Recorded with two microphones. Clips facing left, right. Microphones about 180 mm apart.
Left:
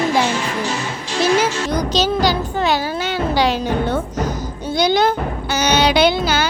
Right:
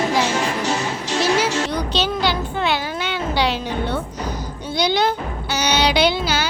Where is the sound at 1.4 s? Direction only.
40° left (ahead or behind).